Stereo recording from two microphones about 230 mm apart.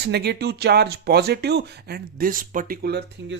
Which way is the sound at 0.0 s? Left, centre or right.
Right.